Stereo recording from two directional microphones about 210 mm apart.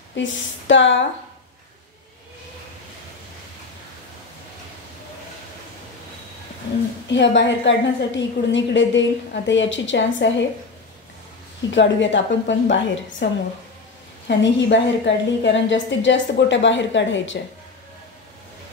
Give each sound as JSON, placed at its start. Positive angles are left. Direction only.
{"t": 0.1, "sound": "a woman's voice", "side_deg": 60}
{"t": 7.1, "sound": "a woman's voice", "side_deg": 60}
{"t": 11.7, "sound": "a woman's voice", "side_deg": 60}